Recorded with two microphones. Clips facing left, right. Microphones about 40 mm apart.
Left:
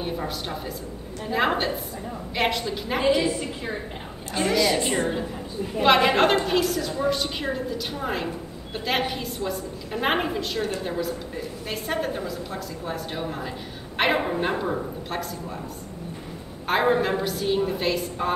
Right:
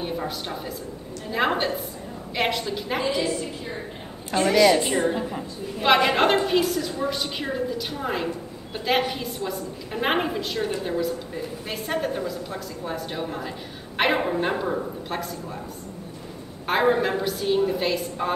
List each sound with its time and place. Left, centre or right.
0.0 s a woman's voice: centre
3.3 s a woman's voice: left
4.4 s a woman's voice: centre
16.6 s a woman's voice: centre